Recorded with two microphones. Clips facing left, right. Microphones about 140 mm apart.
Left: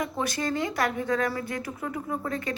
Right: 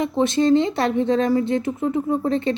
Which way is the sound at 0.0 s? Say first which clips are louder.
Right 10 dB; 25° right (ahead or behind).